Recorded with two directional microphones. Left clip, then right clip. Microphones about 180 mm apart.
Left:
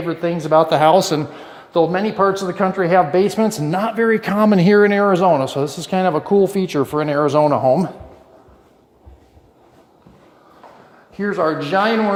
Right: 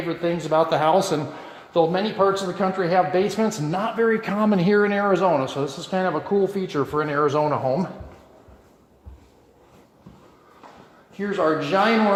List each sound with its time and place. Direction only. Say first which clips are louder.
0.1 s speech: left 6 dB; 45° left (ahead or behind)
11.2 s speech: left 3 dB; 45° left (ahead or behind)